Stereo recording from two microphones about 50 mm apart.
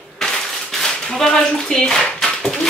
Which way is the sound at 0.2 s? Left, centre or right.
Centre.